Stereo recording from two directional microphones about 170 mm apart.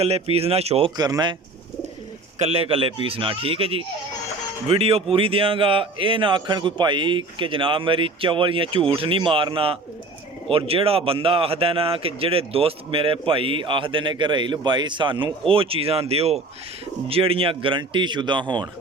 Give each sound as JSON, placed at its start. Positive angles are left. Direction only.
{"t": 0.0, "sound": "speech", "side_deg": -35}
{"t": 0.9, "sound": "speech", "side_deg": -25}
{"t": 2.4, "sound": "speech", "side_deg": -35}